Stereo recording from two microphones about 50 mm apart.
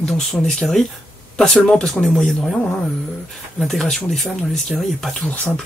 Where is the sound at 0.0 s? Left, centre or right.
Centre.